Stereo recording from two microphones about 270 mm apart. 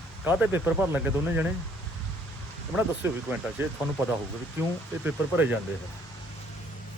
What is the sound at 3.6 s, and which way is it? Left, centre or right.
Speech, centre.